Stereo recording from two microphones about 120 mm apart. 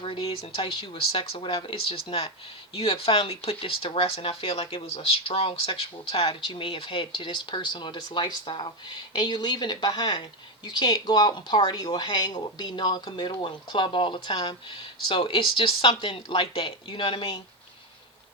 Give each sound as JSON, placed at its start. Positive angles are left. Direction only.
{"t": 0.0, "sound": "speech", "side_deg": 50}